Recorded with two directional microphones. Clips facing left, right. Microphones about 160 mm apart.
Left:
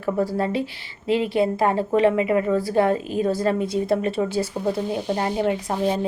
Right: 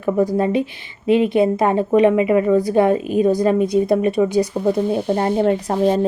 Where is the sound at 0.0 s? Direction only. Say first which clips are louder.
Right 5 dB; 20° right (ahead or behind).